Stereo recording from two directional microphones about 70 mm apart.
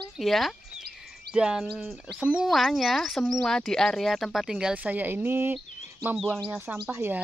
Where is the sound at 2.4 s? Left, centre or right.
Centre.